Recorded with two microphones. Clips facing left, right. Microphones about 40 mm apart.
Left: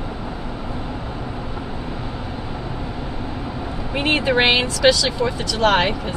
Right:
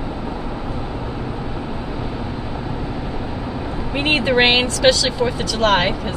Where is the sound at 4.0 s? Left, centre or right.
Centre.